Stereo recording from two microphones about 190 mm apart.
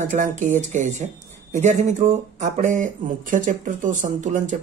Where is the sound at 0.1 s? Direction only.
40° right (ahead or behind).